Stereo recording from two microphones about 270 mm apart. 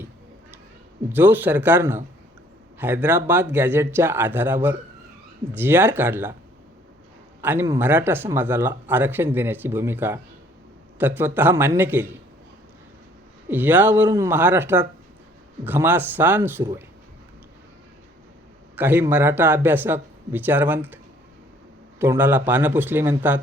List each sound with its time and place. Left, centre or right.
1.1 s speech: centre
7.4 s speech: centre
13.5 s speech: centre
18.8 s speech: centre